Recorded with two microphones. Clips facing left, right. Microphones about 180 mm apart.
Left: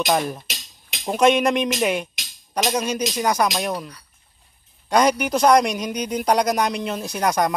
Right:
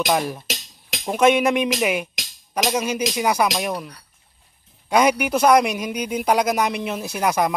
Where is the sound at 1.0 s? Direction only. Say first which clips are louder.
Even; 5° right (ahead or behind).